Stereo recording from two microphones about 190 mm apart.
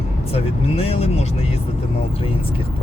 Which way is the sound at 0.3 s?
30° left (ahead or behind).